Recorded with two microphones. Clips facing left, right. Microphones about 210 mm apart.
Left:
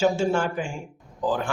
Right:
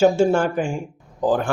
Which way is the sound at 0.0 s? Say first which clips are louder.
Right 6 dB; 50° right (ahead or behind).